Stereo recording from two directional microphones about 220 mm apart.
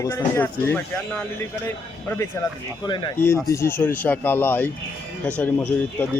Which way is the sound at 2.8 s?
20° left (ahead or behind).